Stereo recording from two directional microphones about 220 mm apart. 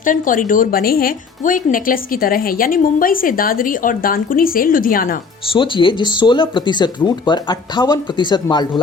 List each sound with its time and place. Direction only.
0.0 s a woman's voice: 35° left (ahead or behind)
5.5 s speech: 20° left (ahead or behind)